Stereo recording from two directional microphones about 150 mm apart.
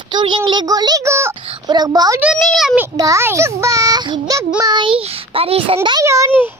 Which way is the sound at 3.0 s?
20° right (ahead or behind).